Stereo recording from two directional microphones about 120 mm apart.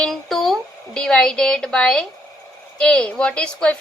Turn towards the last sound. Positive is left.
turn(degrees=10)  # may be behind; listen again after turning